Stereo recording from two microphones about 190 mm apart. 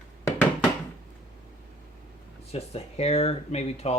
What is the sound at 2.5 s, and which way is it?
Speech, 35° left (ahead or behind).